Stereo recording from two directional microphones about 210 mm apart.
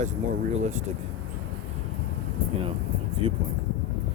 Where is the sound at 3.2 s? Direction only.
25° right (ahead or behind).